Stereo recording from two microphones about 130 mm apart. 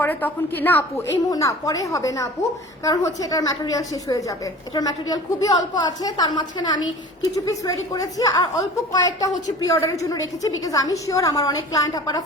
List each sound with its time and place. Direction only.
0.0 s a woman's voice: 15° left (ahead or behind)
1.3 s a woman's voice: 25° left (ahead or behind)